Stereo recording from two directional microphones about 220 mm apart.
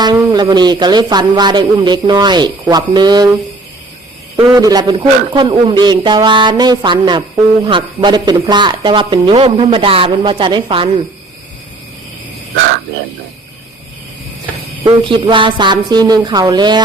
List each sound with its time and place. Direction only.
0.0 s speech: 20° right (ahead or behind)
4.5 s speech: 15° right (ahead or behind)
14.8 s speech: 25° right (ahead or behind)